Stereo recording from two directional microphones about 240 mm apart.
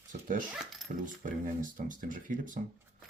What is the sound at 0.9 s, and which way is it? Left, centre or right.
Speech, right.